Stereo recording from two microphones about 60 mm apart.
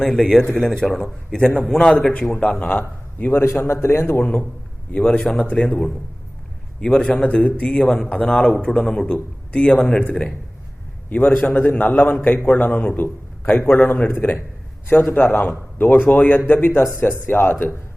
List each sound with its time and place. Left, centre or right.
0.0 s a man's voice: centre
2.4 s a man's voice: left
3.4 s a man's voice: left
4.9 s a man's voice: centre
6.8 s a man's voice: centre
11.4 s a man's voice: left